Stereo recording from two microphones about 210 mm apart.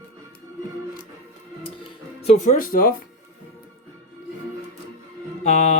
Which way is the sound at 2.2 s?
35° left (ahead or behind).